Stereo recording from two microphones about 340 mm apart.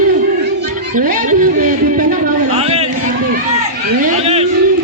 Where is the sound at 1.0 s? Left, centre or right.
Right.